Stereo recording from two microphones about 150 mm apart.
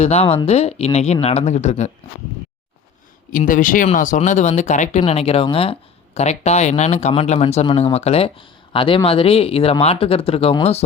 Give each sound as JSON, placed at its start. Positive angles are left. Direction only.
{"t": 0.0, "sound": "speech", "side_deg": 45}
{"t": 3.3, "sound": "speech", "side_deg": 65}